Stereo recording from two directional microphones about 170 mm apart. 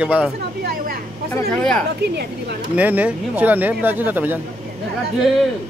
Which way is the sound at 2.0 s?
70° right (ahead or behind).